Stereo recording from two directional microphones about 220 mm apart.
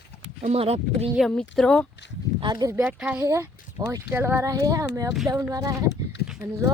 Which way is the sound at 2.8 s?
5° right (ahead or behind).